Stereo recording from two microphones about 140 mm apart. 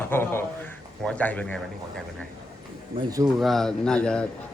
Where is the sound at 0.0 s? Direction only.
15° left (ahead or behind).